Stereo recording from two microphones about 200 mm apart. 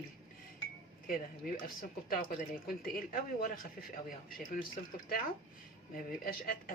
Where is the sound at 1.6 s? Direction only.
45° left (ahead or behind).